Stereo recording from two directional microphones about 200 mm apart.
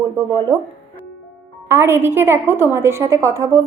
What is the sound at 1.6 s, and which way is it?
A woman's voice, 10° right (ahead or behind).